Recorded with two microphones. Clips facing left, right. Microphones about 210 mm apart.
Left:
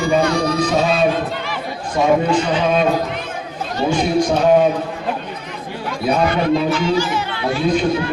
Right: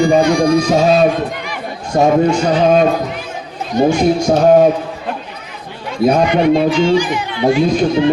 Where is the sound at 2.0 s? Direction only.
45° right (ahead or behind).